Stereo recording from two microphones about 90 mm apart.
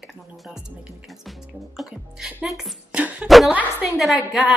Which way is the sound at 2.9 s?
15° right (ahead or behind).